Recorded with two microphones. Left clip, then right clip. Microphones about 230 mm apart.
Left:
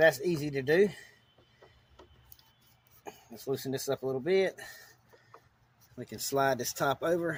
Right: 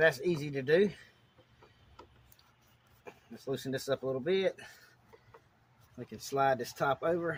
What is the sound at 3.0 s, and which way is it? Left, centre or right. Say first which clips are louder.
Speech: left 2 dB; left.